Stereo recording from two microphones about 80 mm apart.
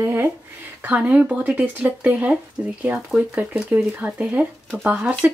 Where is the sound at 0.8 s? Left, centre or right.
Centre.